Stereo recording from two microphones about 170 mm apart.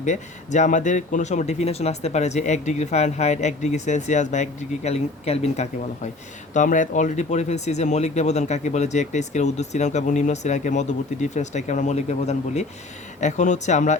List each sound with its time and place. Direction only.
0.0 s speech: 45° left (ahead or behind)